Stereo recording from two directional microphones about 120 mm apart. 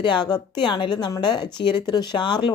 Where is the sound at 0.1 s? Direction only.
35° left (ahead or behind).